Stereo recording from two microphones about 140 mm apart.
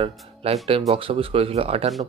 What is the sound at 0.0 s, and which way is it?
Speech, 45° right (ahead or behind).